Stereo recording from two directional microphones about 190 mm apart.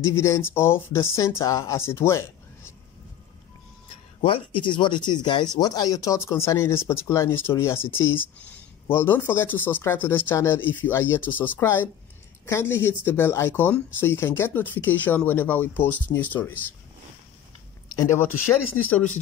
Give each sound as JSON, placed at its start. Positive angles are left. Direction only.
{"t": 0.0, "sound": "speech", "side_deg": 15}
{"t": 4.2, "sound": "speech", "side_deg": 25}
{"t": 17.8, "sound": "speech", "side_deg": 15}